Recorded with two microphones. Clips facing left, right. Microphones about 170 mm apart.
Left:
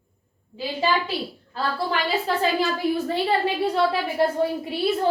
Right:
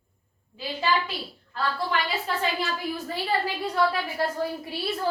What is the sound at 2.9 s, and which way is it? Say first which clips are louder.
A woman's voice: left 5 dB; 25° left (ahead or behind).